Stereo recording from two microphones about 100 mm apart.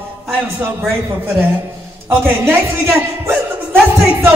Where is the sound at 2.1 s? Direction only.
20° right (ahead or behind).